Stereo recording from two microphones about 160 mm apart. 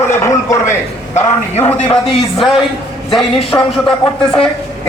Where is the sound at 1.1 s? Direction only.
45° left (ahead or behind).